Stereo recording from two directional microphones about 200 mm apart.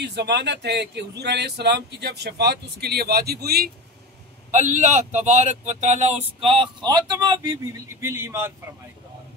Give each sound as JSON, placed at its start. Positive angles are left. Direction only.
{"t": 0.0, "sound": "speech", "side_deg": -55}
{"t": 4.5, "sound": "speech", "side_deg": -40}